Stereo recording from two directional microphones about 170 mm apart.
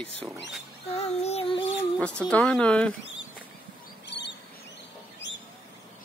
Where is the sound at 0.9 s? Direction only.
35° left (ahead or behind).